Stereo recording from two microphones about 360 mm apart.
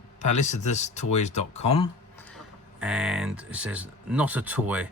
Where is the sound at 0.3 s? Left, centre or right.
Centre.